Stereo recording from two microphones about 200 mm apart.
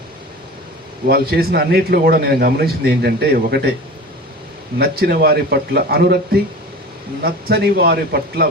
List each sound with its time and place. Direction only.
1.0 s a man's voice: 50° right (ahead or behind)
4.8 s a man's voice: 50° right (ahead or behind)